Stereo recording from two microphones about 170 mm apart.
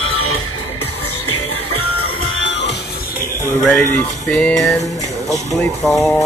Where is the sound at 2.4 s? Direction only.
90° left.